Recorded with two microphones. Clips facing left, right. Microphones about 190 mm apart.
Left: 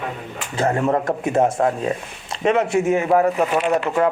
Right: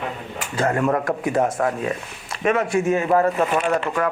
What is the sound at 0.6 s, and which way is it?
A man's voice, 25° left (ahead or behind).